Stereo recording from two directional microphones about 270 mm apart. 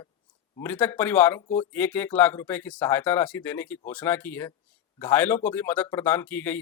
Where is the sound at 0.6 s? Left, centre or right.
Centre.